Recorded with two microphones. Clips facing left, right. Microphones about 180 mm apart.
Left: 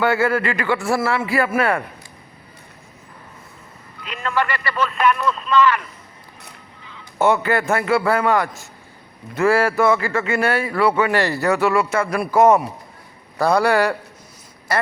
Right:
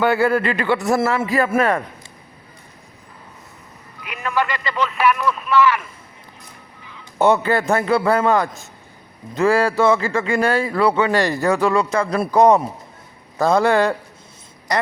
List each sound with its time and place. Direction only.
0.0 s a man's voice: 15° right (ahead or behind)
1.3 s a man's voice: 30° right (ahead or behind)
4.0 s a man's voice: 15° right (ahead or behind)
6.9 s a man's voice: 15° right (ahead or behind)